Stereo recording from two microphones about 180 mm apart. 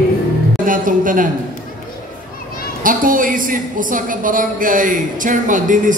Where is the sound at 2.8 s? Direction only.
50° right (ahead or behind).